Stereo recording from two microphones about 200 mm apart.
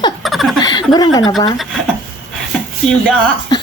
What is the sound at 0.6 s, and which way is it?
Chuckle, 20° left (ahead or behind).